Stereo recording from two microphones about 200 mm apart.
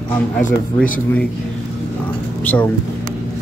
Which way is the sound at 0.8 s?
5° left (ahead or behind).